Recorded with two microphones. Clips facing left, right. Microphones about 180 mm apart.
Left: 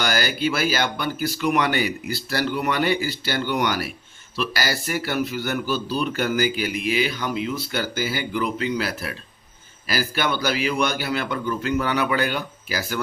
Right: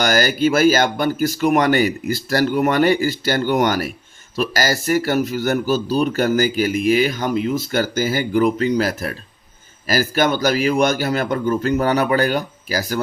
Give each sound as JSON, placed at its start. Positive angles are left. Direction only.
{"t": 0.0, "sound": "a man's voice", "side_deg": -45}